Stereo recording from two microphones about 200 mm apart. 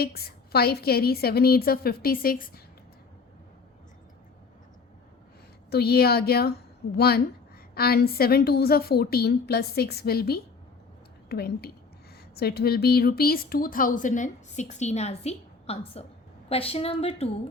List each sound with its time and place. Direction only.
0.0 s a woman's voice: 50° left (ahead or behind)
5.7 s a woman's voice: 50° left (ahead or behind); by 17.2 s 30° left (ahead or behind)